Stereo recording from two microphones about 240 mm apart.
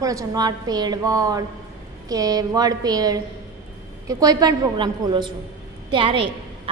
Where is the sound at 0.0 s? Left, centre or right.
Centre.